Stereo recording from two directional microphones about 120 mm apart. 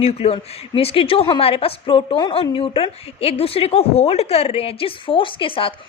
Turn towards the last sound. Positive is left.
turn(degrees=45)  # may be behind; listen again after turning